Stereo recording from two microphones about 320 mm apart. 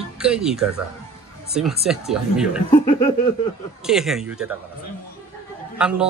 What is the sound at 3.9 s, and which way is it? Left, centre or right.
Speech, centre.